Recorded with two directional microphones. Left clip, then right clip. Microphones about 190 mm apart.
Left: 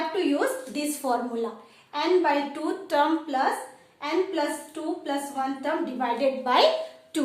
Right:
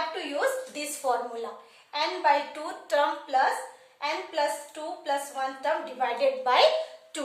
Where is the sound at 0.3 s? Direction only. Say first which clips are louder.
Left 1 dB; 20° left (ahead or behind).